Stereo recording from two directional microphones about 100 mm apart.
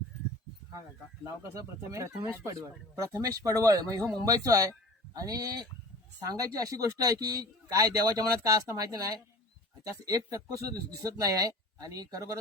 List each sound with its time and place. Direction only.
0.7 s a man's voice: 35° right (ahead or behind)